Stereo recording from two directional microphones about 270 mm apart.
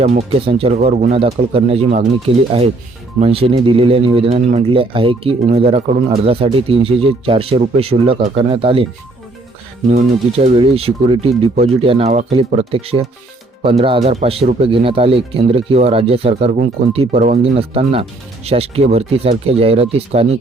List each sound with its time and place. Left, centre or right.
0.0 s speech: right
3.2 s speech: right
9.9 s speech: right